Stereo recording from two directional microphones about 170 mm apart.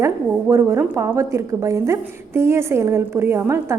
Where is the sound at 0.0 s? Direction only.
15° right (ahead or behind).